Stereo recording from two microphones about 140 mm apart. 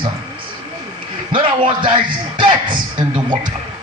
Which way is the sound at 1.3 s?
35° right (ahead or behind).